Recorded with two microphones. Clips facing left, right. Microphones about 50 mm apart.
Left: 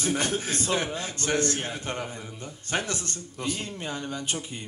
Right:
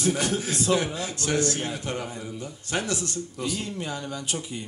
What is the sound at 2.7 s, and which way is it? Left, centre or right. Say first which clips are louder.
A man's voice: right 1 dB; left.